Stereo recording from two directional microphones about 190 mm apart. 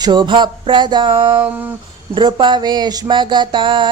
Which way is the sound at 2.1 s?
25° right (ahead or behind).